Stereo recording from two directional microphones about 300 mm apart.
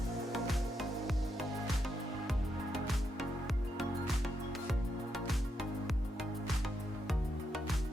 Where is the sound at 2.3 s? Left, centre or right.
Centre.